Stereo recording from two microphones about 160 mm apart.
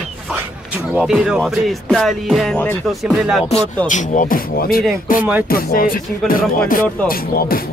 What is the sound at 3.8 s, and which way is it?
Speech, 50° left (ahead or behind).